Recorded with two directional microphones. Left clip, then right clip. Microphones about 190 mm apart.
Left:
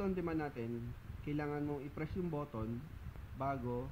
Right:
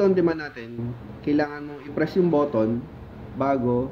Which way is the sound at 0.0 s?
40° left (ahead or behind).